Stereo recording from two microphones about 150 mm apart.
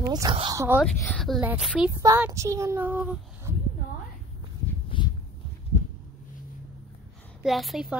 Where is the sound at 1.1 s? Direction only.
Centre (ahead or behind).